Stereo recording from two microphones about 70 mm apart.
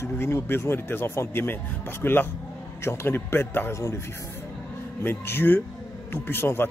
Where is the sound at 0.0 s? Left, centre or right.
Left.